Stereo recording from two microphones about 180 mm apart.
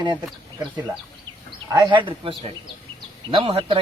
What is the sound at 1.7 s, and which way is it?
Speech, 25° right (ahead or behind).